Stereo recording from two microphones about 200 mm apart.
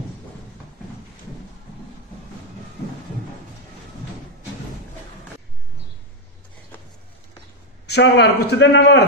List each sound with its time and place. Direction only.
7.8 s a man's voice: 55° left (ahead or behind)